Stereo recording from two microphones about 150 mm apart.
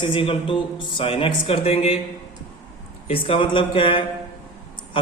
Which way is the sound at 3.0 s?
40° left (ahead or behind).